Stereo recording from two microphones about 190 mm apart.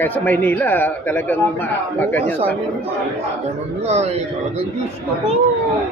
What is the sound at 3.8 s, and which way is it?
Speech, 35° right (ahead or behind).